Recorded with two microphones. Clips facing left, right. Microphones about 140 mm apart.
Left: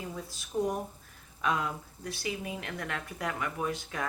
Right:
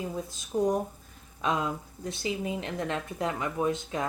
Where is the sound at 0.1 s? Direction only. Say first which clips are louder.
Right 4 dB; 20° right (ahead or behind).